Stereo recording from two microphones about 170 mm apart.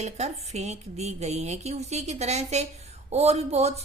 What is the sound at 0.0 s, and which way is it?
Speech, 40° right (ahead or behind).